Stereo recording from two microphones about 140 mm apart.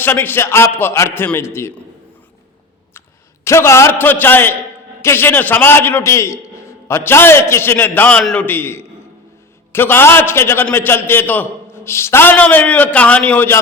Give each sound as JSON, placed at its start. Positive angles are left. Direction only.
{"t": 0.0, "sound": "a man's voice", "side_deg": 15}
{"t": 3.4, "sound": "a man's voice", "side_deg": 20}